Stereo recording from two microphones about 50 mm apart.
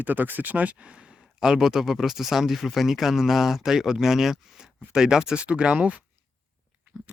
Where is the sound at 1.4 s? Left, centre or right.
Centre.